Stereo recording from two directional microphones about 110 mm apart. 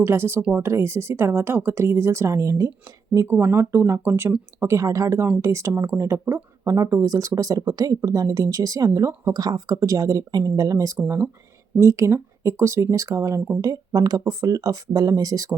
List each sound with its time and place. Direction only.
0.0 s speech: 20° right (ahead or behind)
3.2 s speech: 20° right (ahead or behind)